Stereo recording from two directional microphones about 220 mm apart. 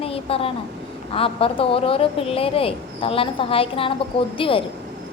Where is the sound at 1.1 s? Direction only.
25° left (ahead or behind).